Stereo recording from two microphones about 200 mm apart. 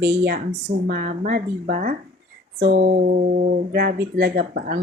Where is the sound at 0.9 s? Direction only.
45° right (ahead or behind).